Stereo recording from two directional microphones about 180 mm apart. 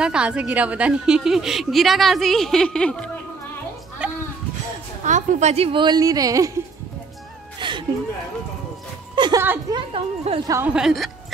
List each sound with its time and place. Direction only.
0.0 s a woman's voice: 5° right (ahead or behind)
4.0 s a sound: 5° right (ahead or behind)
5.0 s a woman's voice: 45° right (ahead or behind); by 6.5 s 20° right (ahead or behind)
7.6 s a sound: 25° right (ahead or behind)
9.1 s a woman's voice: 25° right (ahead or behind)
10.5 s a woman's voice: 10° right (ahead or behind)